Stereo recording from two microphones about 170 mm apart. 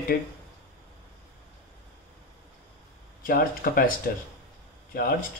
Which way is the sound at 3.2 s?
60° left (ahead or behind).